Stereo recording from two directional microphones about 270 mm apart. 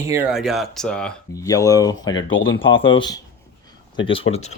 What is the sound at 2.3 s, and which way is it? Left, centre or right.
Speech, left.